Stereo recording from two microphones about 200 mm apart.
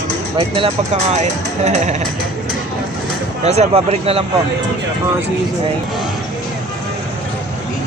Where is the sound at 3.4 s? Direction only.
30° right (ahead or behind).